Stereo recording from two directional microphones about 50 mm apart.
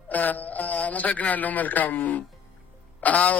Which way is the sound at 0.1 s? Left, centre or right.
Left.